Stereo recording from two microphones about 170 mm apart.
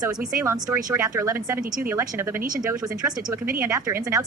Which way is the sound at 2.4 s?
55° right (ahead or behind).